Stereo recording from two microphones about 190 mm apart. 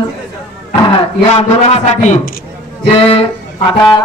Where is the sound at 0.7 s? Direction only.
30° left (ahead or behind).